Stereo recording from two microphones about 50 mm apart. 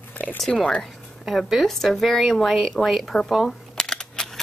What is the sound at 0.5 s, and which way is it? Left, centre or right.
Speech, left.